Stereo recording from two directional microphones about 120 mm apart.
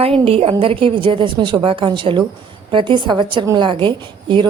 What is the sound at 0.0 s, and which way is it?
A woman's voice, 55° right (ahead or behind).